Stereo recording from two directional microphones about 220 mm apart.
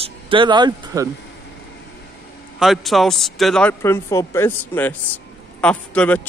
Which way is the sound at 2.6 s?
Centre (ahead or behind).